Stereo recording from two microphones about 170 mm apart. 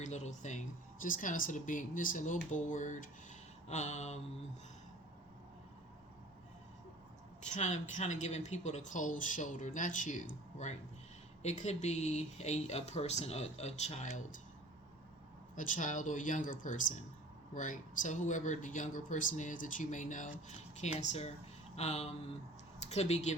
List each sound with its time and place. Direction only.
0.0 s a woman's voice: 45° left (ahead or behind)
7.4 s a woman's voice: 45° left (ahead or behind)
11.4 s speech: 40° left (ahead or behind)
15.5 s a woman's voice: 50° left (ahead or behind)